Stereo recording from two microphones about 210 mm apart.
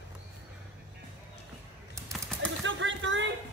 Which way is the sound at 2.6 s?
60° right (ahead or behind).